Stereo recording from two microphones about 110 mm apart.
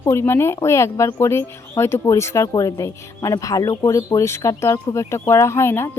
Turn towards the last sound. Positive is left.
turn(degrees=25)  # may be behind; listen again after turning